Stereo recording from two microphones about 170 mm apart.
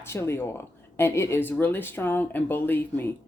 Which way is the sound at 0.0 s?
15° left (ahead or behind).